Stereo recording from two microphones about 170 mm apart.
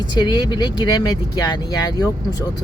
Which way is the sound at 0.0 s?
25° left (ahead or behind).